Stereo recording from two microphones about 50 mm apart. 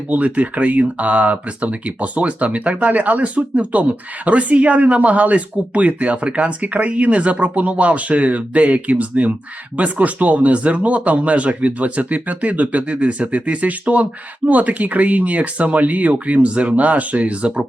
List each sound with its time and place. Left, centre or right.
0.1 s speech: right